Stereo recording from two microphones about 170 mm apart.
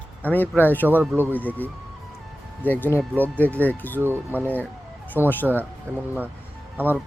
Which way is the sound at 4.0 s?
10° right (ahead or behind).